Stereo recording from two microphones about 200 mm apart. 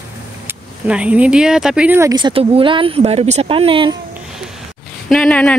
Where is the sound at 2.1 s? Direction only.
25° right (ahead or behind).